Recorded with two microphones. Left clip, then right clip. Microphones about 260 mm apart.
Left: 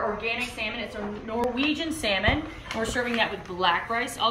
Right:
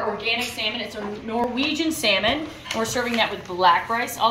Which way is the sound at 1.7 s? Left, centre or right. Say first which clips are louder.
Right 6 dB; centre.